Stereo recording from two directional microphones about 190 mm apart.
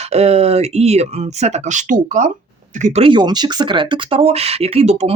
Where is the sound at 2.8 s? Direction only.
30° right (ahead or behind).